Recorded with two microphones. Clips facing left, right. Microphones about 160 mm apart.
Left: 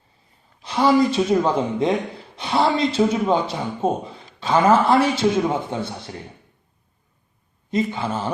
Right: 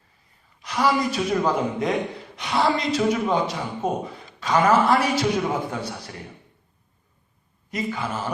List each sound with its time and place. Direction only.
0.6 s a man's voice: 25° left (ahead or behind)
7.7 s a man's voice: 25° left (ahead or behind)